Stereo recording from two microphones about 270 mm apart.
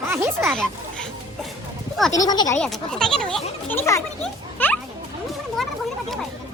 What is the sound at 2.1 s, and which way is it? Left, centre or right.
Speech, centre.